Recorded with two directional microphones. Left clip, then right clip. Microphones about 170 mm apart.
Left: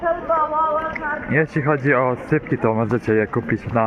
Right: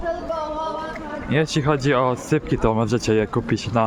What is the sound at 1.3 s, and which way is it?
Speech, 30° right (ahead or behind).